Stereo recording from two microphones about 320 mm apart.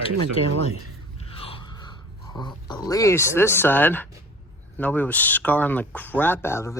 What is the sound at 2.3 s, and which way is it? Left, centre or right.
Speech, centre.